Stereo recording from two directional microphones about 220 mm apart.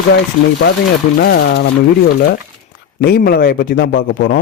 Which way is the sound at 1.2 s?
50° left (ahead or behind).